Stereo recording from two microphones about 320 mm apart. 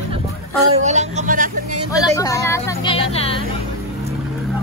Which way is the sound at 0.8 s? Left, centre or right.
Right.